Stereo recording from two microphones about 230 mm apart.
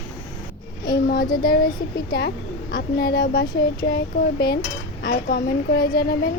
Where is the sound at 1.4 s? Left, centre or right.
Left.